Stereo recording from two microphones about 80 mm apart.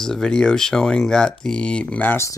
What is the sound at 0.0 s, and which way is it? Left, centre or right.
Speech, centre.